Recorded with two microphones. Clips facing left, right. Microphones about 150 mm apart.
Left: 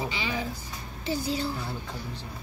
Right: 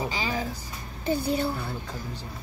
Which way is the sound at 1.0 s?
55° right (ahead or behind).